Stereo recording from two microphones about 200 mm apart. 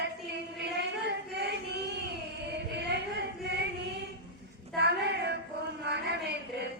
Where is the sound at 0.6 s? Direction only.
60° right (ahead or behind).